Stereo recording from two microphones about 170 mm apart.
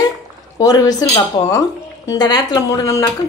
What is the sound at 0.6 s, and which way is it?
A woman's voice, 20° left (ahead or behind).